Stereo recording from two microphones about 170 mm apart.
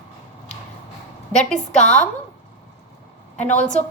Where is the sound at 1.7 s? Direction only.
45° left (ahead or behind).